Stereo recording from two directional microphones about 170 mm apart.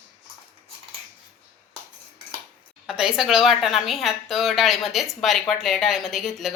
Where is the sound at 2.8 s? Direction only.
5° right (ahead or behind).